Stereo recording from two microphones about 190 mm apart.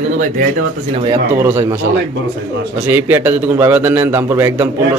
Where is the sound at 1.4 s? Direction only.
10° right (ahead or behind).